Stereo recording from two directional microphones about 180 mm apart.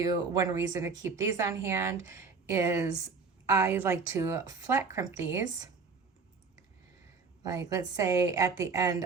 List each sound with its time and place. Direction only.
0.0 s a woman's voice: 20° right (ahead or behind)
7.4 s a woman's voice: 20° right (ahead or behind)